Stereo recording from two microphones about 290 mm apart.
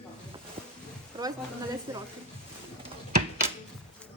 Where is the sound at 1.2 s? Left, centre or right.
Centre.